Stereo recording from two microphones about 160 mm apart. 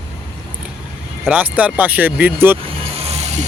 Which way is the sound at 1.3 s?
10° right (ahead or behind).